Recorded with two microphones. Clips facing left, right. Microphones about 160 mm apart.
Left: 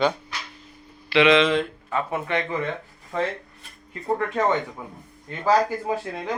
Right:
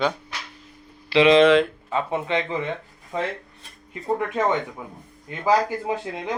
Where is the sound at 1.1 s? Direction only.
35° right (ahead or behind).